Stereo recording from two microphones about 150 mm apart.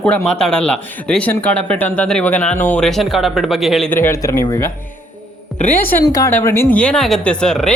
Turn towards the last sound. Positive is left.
turn(degrees=5)  # may be behind; listen again after turning